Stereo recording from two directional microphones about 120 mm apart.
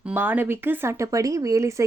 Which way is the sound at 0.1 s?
15° right (ahead or behind).